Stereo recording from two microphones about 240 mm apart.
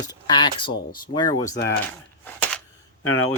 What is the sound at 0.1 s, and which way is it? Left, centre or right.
Speech, centre.